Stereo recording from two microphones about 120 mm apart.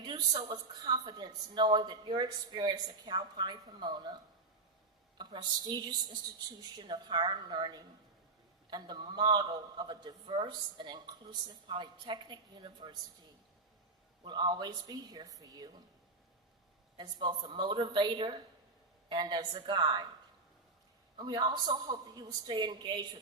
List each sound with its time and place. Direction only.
0.0 s a man's voice: 40° right (ahead or behind)
14.3 s a man's voice: 40° right (ahead or behind)
17.0 s a man's voice: 40° right (ahead or behind)
21.2 s a man's voice: 35° right (ahead or behind)